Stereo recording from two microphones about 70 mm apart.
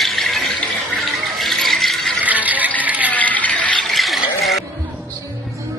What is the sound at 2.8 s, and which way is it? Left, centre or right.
Rattle, right.